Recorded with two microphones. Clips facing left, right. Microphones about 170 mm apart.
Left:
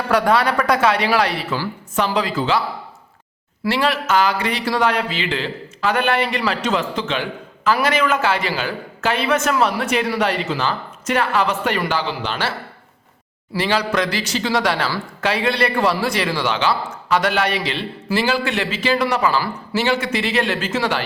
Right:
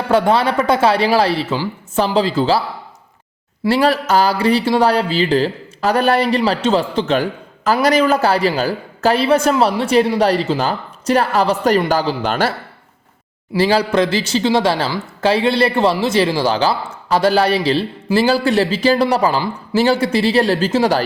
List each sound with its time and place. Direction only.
0.1 s speech: 25° right (ahead or behind); by 12.5 s 45° right (ahead or behind)
13.6 s speech: 30° right (ahead or behind)